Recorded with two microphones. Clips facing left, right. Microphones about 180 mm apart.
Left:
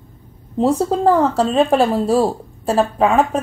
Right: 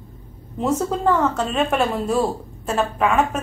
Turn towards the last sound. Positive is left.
turn(degrees=35)  # may be behind; listen again after turning